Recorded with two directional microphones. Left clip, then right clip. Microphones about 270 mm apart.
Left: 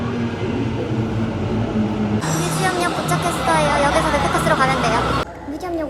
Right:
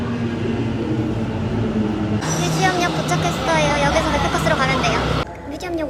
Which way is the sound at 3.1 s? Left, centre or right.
Centre.